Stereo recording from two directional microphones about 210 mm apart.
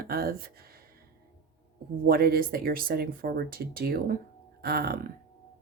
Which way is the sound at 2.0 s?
45° right (ahead or behind).